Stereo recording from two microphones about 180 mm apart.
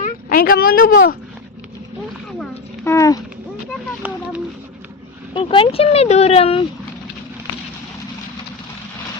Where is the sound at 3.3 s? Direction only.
10° right (ahead or behind).